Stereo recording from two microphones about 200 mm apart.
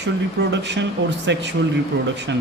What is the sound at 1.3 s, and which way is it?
Speech, 60° right (ahead or behind).